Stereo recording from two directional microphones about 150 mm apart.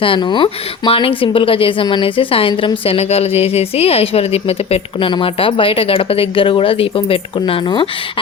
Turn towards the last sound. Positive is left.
turn(degrees=35)  # may be behind; listen again after turning